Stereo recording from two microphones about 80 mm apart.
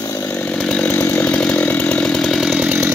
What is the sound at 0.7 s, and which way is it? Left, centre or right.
Chainsaw, centre.